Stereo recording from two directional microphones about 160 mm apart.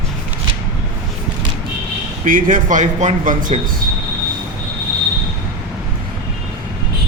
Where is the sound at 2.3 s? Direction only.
55° right (ahead or behind).